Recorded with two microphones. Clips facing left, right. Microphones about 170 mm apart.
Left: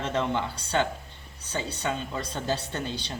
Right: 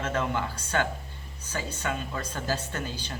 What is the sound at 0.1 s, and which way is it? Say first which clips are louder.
Speech: left 3 dB; 25° left (ahead or behind).